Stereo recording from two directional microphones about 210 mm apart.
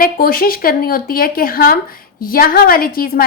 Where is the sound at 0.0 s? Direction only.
45° left (ahead or behind).